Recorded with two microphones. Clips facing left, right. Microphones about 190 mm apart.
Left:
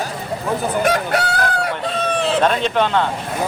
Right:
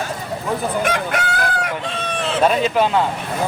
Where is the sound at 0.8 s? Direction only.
35° left (ahead or behind).